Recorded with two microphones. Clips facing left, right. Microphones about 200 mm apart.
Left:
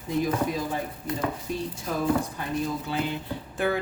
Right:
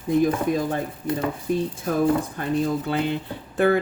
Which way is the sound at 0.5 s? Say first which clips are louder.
Right 6 dB; 50° right (ahead or behind).